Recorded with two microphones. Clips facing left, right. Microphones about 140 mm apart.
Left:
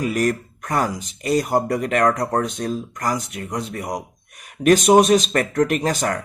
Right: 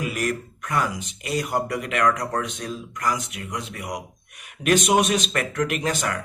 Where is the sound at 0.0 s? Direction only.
40° left (ahead or behind).